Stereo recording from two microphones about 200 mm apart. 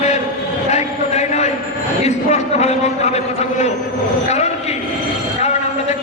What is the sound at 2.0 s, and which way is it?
A man's voice, 35° left (ahead or behind).